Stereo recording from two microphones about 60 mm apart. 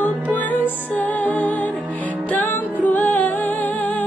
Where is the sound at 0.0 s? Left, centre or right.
Left.